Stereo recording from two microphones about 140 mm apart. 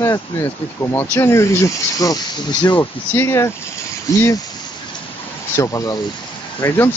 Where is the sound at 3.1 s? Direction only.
20° left (ahead or behind).